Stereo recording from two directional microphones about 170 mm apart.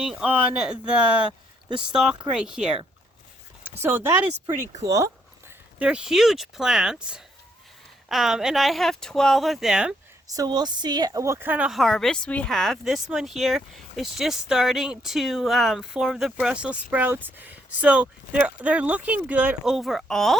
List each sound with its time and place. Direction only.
0.0 s a woman's voice: 5° right (ahead or behind); by 5.1 s 20° right (ahead or behind)
5.8 s a woman's voice: 5° right (ahead or behind)
10.2 s a woman's voice: 20° right (ahead or behind); by 20.3 s centre (ahead or behind)